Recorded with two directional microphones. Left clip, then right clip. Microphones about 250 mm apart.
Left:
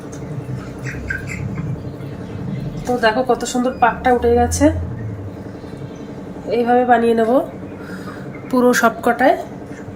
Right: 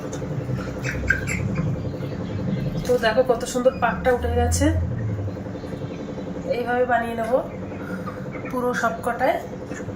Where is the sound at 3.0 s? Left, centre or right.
Left.